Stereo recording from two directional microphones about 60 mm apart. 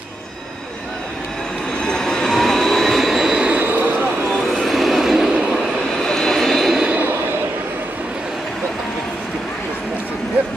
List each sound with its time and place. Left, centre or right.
1.9 s train: centre
3.4 s train: right
4.6 s train: centre
6.0 s vehicle: centre